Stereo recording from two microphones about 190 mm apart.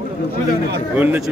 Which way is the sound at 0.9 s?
10° right (ahead or behind).